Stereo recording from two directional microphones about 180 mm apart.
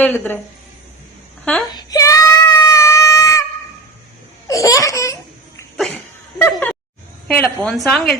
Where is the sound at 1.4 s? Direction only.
Centre (ahead or behind).